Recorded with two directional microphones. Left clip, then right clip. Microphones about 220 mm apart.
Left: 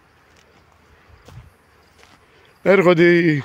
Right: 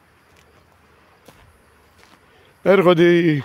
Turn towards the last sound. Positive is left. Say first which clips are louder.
# even
turn(degrees=-5)  # may be behind; listen again after turning